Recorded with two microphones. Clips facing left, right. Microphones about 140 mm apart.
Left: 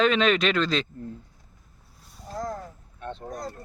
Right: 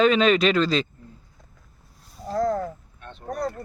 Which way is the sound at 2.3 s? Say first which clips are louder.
Right 9 dB; 85° right.